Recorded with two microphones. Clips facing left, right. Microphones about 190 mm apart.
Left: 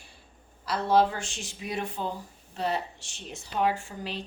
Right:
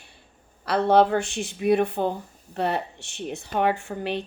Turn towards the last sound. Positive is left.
turn(degrees=-60)  # may be behind; listen again after turning